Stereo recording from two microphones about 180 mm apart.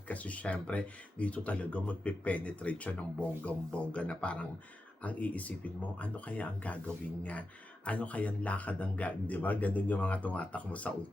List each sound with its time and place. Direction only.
0.1 s speech: 10° left (ahead or behind)